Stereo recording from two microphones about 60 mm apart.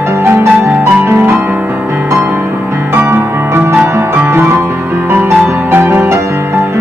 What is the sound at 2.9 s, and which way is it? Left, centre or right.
Music, right.